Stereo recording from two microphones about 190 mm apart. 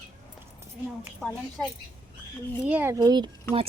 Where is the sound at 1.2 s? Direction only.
Centre (ahead or behind).